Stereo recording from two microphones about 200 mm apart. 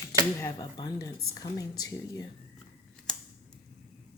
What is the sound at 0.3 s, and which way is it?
Speech, 15° left (ahead or behind).